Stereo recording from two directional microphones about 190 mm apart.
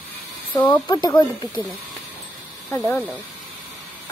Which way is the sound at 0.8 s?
20° left (ahead or behind).